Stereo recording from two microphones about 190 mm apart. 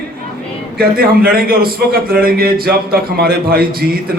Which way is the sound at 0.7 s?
50° right (ahead or behind).